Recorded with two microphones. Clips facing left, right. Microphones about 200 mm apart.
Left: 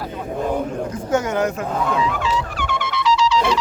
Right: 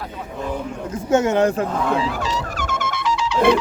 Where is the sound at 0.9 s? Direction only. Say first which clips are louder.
Right 7 dB; 25° right (ahead or behind).